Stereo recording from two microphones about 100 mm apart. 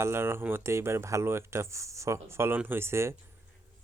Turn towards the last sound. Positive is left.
turn(degrees=-25)  # may be behind; listen again after turning